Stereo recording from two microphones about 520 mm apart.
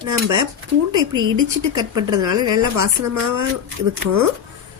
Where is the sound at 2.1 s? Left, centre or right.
Right.